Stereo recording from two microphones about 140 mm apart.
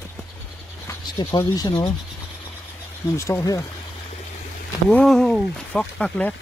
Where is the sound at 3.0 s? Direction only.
20° left (ahead or behind).